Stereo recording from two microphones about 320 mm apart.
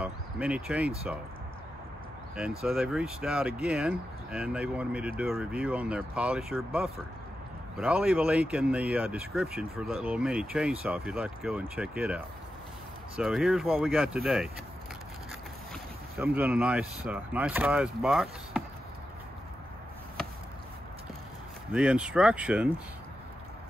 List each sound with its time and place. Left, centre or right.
0.0 s speech: centre
2.6 s speech: centre
16.2 s speech: centre
21.7 s speech: centre